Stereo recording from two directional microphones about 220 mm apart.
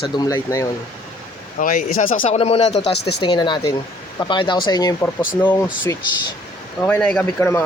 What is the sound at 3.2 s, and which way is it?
Speech, 20° left (ahead or behind).